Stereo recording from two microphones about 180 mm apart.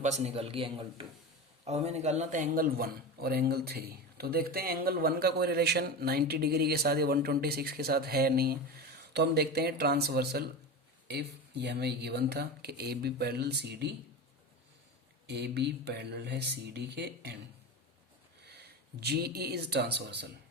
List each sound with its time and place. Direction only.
0.0 s a man's voice: 40° right (ahead or behind); by 13.9 s 70° right (ahead or behind)
15.3 s speech: 65° right (ahead or behind)
18.4 s speech: 65° right (ahead or behind)